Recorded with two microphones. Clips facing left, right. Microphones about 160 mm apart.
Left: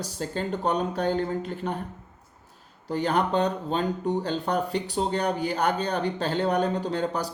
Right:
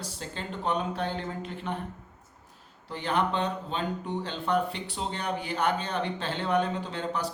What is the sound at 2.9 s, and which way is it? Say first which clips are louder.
Speech: left 4 dB; 40° left (ahead or behind).